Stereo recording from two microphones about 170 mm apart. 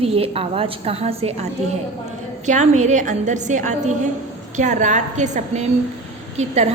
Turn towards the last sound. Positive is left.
turn(degrees=-40)  # may be behind; listen again after turning